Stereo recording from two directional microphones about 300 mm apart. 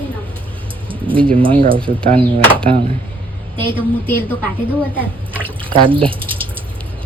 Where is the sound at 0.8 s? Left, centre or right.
Centre.